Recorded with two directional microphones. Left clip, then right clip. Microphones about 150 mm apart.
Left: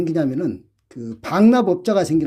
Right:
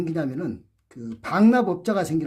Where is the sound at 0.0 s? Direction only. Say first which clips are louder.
Left 7 dB; 30° left (ahead or behind).